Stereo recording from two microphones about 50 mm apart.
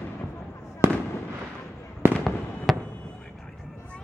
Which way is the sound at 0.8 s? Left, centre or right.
Right.